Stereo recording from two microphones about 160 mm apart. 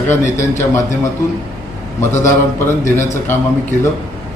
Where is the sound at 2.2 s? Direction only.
15° left (ahead or behind).